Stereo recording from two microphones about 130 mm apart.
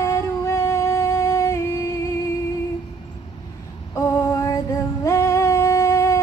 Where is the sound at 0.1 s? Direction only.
20° left (ahead or behind).